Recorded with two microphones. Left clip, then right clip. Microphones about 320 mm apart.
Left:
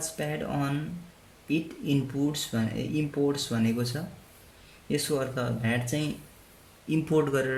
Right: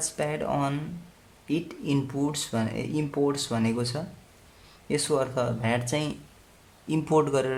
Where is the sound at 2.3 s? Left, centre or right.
Centre.